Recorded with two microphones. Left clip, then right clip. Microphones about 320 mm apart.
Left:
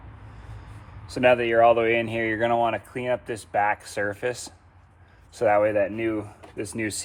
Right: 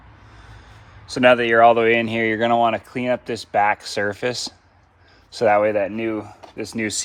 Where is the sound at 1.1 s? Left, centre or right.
Right.